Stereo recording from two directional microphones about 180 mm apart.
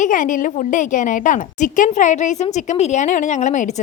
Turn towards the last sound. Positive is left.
turn(degrees=40)  # may be behind; listen again after turning